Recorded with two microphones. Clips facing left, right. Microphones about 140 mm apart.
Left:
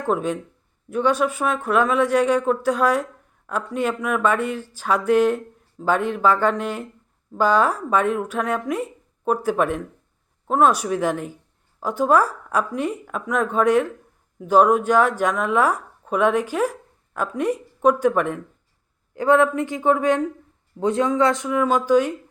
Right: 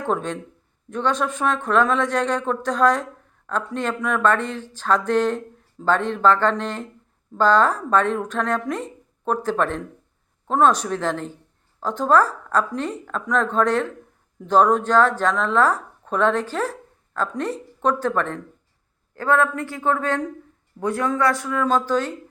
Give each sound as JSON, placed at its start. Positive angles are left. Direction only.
{"t": 0.1, "sound": "speech", "side_deg": 5}